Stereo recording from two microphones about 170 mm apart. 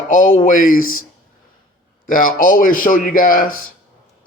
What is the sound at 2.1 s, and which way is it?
A man's voice, 55° left (ahead or behind).